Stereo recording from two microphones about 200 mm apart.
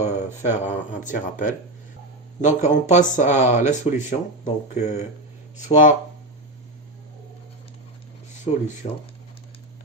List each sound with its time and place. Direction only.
0.4 s speech: 35° left (ahead or behind)
8.5 s speech: 30° left (ahead or behind)